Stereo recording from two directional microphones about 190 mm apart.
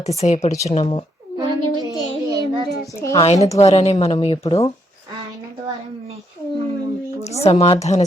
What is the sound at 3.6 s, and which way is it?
Speech, 35° left (ahead or behind).